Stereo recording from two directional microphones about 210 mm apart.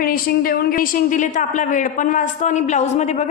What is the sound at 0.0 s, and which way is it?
A woman's voice, 45° left (ahead or behind).